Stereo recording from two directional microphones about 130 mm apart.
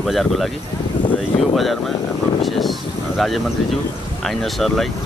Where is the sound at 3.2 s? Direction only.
Centre (ahead or behind).